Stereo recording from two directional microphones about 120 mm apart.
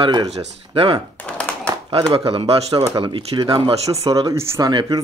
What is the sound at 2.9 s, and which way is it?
Speech, 50° right (ahead or behind).